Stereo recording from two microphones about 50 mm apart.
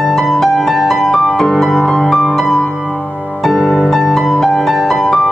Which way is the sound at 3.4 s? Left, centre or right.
Centre.